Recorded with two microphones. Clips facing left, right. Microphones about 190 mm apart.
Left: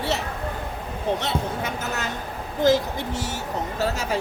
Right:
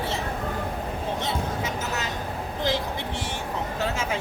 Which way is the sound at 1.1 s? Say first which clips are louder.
Left 2 dB; 65° left (ahead or behind).